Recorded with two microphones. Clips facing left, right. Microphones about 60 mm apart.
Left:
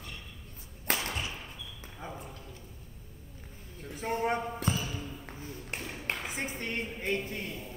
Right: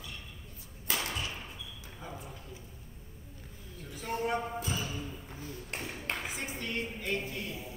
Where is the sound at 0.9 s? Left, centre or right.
Left.